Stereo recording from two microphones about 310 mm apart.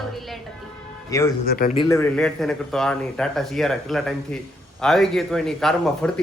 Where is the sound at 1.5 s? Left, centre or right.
Left.